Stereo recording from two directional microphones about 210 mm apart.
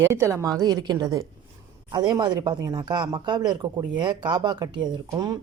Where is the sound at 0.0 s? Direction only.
15° right (ahead or behind).